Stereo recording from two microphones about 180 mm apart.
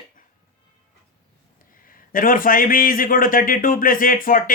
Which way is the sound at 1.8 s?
50° left (ahead or behind).